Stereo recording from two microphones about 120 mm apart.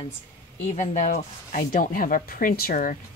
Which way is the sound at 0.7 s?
80° left.